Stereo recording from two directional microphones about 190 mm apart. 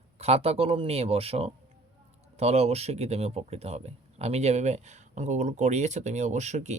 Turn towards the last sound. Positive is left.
turn(degrees=-40)  # may be behind; listen again after turning